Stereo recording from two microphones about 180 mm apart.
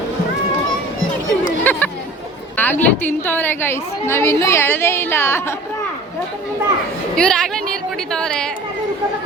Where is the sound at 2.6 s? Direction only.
10° left (ahead or behind).